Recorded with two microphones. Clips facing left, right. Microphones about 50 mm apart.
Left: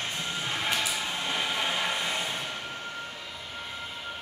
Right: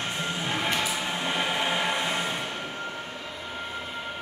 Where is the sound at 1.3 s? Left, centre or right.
Right.